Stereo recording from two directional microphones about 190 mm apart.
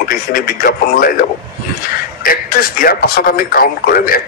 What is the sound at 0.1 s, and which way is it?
Speech, 50° left (ahead or behind).